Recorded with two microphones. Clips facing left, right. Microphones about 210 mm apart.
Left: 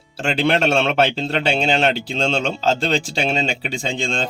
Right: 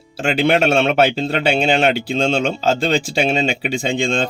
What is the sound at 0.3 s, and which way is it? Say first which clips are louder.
Speech: right 3 dB; 5° right (ahead or behind).